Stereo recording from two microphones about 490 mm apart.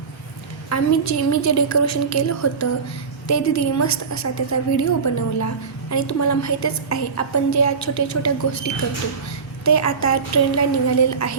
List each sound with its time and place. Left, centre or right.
0.7 s a woman's voice: left